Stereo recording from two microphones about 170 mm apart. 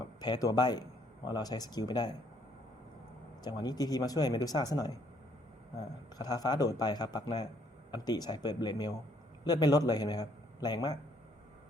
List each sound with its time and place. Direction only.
0.0 s speech: 25° left (ahead or behind)
3.4 s a man's voice: 25° left (ahead or behind)